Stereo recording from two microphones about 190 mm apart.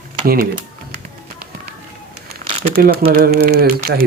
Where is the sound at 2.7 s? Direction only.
50° right (ahead or behind).